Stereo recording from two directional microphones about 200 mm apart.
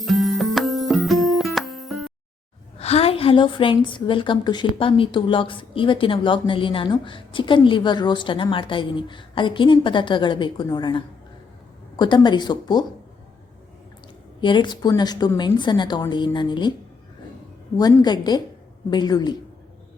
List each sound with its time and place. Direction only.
0.0 s music: centre (ahead or behind)
2.7 s a woman's voice: 30° left (ahead or behind)
14.4 s a woman's voice: 25° left (ahead or behind)
17.7 s a woman's voice: 20° left (ahead or behind)